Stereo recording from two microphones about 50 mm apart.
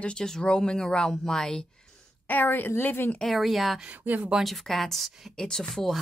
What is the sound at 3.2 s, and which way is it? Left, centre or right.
Speech, centre.